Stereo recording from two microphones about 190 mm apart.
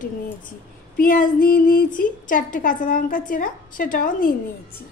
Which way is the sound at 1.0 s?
50° left (ahead or behind).